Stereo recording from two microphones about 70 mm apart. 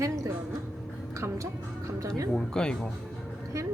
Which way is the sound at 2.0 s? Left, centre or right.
Right.